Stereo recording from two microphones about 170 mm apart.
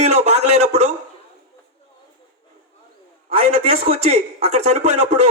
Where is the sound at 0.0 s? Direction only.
40° right (ahead or behind).